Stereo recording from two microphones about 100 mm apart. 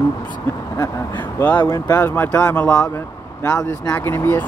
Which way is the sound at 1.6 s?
40° left (ahead or behind).